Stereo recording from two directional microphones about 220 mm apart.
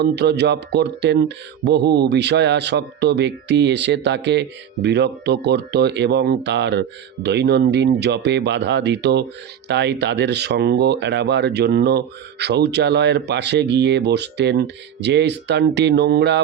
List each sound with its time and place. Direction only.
0.0 s speech: 50° right (ahead or behind)